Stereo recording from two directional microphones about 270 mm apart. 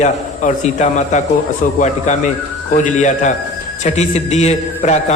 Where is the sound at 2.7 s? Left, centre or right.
Left.